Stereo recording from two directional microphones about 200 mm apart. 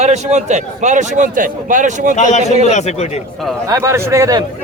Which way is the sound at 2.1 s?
35° left (ahead or behind).